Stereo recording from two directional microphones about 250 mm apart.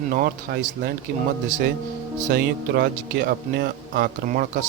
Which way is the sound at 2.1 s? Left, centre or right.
Right.